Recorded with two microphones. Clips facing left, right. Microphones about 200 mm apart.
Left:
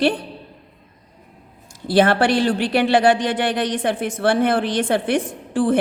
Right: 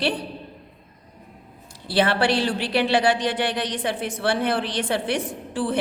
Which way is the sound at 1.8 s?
50° left (ahead or behind).